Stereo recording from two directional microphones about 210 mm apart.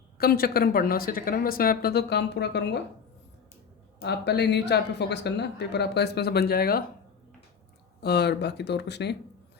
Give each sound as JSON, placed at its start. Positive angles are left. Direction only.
{"t": 0.2, "sound": "speech", "side_deg": 45}
{"t": 4.0, "sound": "speech", "side_deg": 55}
{"t": 8.0, "sound": "speech", "side_deg": 50}